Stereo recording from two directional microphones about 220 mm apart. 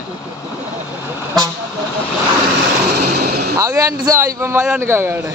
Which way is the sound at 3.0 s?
45° right (ahead or behind).